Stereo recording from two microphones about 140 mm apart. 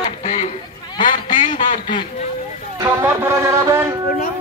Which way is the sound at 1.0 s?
65° left (ahead or behind).